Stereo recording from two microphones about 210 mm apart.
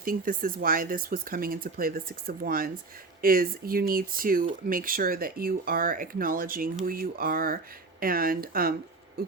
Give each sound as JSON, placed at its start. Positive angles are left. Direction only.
{"t": 0.0, "sound": "speech", "side_deg": -45}
{"t": 9.2, "sound": "owl", "side_deg": -50}